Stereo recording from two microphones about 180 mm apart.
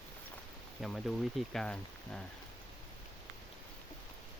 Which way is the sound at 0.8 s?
Centre (ahead or behind).